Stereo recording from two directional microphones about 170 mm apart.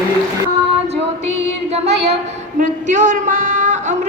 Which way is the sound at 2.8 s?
45° right (ahead or behind).